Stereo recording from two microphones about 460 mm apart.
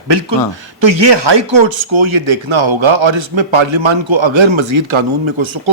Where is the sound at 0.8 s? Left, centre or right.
Right.